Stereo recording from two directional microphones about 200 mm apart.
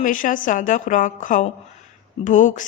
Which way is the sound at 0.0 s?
40° left (ahead or behind).